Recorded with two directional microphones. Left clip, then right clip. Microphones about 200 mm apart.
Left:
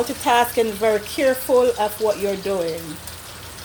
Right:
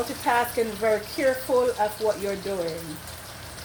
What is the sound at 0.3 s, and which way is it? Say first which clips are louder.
Speech: left 6 dB; 35° left (ahead or behind).